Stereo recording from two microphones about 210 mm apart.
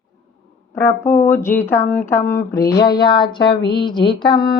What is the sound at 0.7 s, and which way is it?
Speech, 10° left (ahead or behind).